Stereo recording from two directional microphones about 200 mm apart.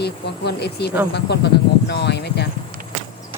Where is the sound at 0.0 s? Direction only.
55° left (ahead or behind).